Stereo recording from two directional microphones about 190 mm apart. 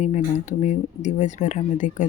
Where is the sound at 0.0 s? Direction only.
40° left (ahead or behind).